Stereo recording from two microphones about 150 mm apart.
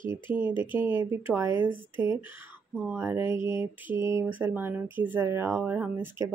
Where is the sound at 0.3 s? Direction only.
10° right (ahead or behind).